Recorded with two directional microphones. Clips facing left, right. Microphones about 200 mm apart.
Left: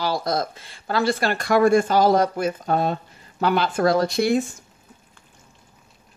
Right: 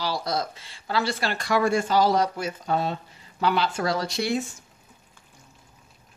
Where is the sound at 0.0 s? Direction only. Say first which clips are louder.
Left 4 dB; 50° left (ahead or behind).